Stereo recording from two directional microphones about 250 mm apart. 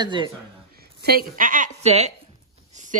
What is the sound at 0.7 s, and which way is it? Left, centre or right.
A woman's voice, right.